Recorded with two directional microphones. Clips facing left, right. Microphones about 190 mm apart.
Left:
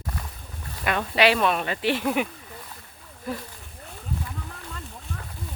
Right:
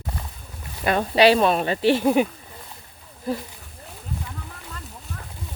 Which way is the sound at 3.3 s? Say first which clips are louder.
Right 5 dB; 35° right (ahead or behind).